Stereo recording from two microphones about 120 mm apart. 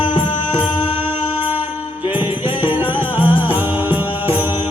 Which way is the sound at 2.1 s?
15° right (ahead or behind).